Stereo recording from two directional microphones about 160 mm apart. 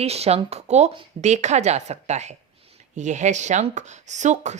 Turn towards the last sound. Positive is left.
turn(degrees=-45)  # may be behind; listen again after turning